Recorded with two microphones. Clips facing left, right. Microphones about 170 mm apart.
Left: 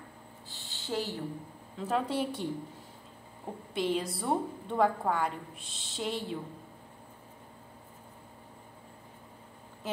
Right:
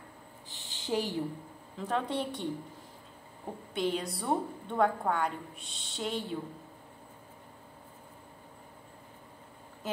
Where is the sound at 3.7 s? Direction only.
Centre (ahead or behind).